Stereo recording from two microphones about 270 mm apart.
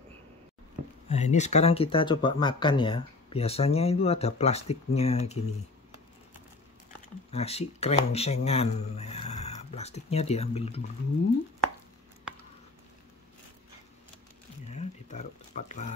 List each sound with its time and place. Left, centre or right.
1.0 s speech: left
7.2 s speech: left
14.7 s a sound: left